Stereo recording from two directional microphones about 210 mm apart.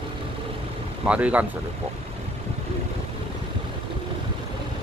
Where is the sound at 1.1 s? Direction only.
5° right (ahead or behind).